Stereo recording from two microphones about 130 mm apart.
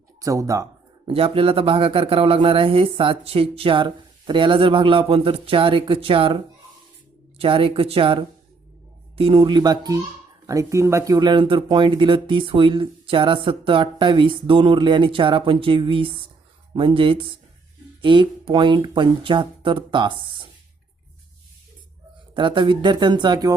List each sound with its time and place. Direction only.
0.2 s speech: 25° right (ahead or behind)
1.0 s a man's voice: 45° right (ahead or behind)
7.3 s a man's voice: 45° right (ahead or behind)
22.4 s speech: 40° right (ahead or behind)